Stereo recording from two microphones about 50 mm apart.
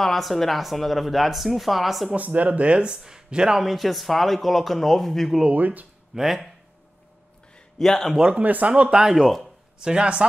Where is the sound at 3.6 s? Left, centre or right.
Centre.